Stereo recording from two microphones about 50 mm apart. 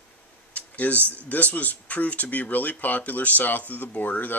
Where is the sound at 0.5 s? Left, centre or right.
Left.